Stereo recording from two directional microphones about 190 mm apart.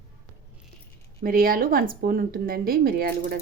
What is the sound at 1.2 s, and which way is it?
Speech, 50° right (ahead or behind).